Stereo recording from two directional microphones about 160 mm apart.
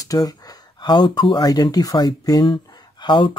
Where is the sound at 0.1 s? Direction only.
25° left (ahead or behind).